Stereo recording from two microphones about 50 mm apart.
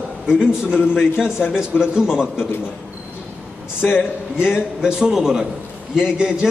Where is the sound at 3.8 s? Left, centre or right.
Left.